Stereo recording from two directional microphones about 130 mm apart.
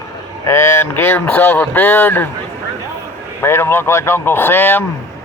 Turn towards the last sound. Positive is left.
turn(degrees=15)  # may be behind; listen again after turning